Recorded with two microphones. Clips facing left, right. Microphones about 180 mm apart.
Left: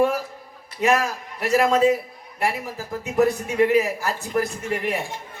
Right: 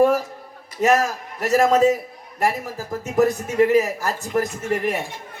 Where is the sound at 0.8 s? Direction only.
40° right (ahead or behind).